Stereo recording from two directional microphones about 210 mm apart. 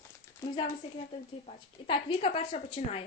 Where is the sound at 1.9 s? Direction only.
25° left (ahead or behind).